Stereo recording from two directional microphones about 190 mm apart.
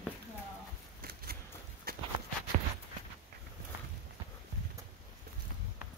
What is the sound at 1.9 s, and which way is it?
Walk, 55° right (ahead or behind).